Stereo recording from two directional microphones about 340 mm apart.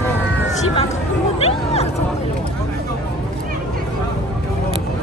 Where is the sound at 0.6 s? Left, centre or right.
Centre.